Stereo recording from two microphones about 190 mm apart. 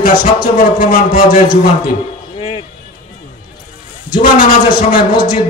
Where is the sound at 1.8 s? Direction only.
30° left (ahead or behind).